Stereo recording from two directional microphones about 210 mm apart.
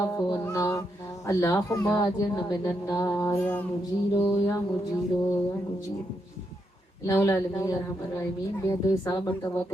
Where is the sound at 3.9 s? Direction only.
25° left (ahead or behind).